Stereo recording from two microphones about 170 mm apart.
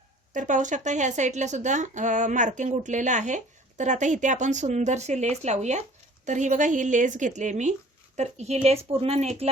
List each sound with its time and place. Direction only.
0.3 s speech: 45° right (ahead or behind)